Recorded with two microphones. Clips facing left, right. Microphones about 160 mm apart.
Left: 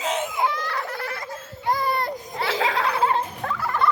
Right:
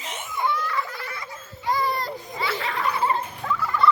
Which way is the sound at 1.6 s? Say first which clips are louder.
Left 1 dB; 55° left (ahead or behind).